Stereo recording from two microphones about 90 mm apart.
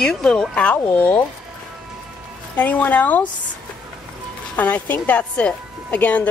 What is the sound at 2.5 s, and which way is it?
Speech, 15° left (ahead or behind).